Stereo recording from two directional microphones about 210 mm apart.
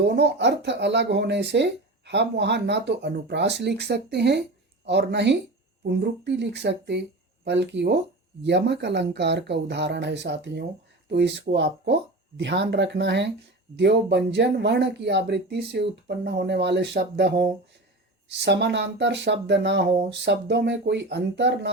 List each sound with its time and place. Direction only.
0.0 s speech: 55° right (ahead or behind)